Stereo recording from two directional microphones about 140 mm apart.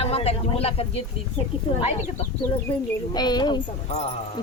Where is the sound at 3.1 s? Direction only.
30° left (ahead or behind).